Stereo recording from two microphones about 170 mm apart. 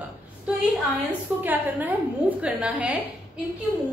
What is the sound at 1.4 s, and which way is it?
A woman's voice, 10° right (ahead or behind).